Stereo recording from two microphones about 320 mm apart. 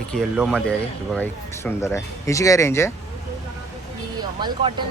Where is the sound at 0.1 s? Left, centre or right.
Centre.